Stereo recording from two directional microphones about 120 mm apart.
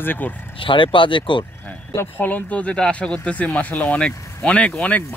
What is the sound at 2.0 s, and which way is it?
Speech, 15° left (ahead or behind).